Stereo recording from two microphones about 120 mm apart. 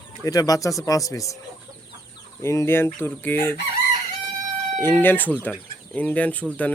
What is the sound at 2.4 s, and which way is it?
Speech, 20° left (ahead or behind).